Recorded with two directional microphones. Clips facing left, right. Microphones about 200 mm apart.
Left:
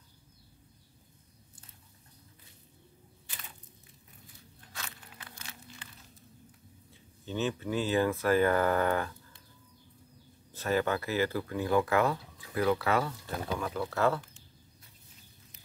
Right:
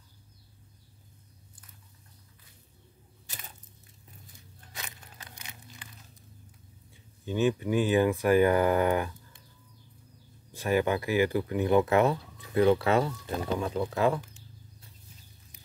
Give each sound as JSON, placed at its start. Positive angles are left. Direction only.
{"t": 4.7, "sound": "a sound", "side_deg": -15}
{"t": 6.9, "sound": "speech", "side_deg": -15}
{"t": 10.5, "sound": "speech", "side_deg": -15}